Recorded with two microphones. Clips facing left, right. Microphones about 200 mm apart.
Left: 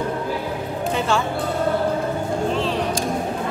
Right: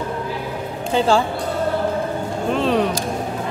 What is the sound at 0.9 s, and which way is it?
Speech, 35° right (ahead or behind).